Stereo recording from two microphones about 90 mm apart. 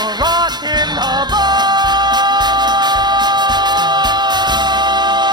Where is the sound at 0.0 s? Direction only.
50° right (ahead or behind).